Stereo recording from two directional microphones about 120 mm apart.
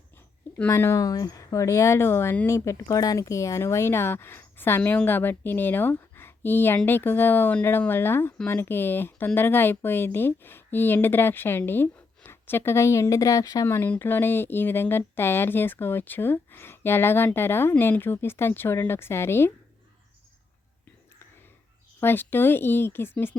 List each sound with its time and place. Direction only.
0.7 s speech: 25° left (ahead or behind)
22.0 s speech: 15° left (ahead or behind)